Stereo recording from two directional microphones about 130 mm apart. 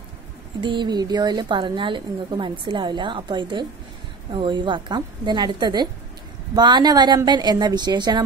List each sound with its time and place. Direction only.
0.6 s a woman's voice: 40° right (ahead or behind)